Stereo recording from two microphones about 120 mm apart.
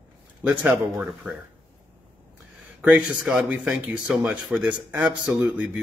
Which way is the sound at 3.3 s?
5° right (ahead or behind).